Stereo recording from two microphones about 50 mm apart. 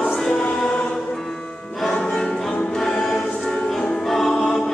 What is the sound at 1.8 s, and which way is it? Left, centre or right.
Music, centre.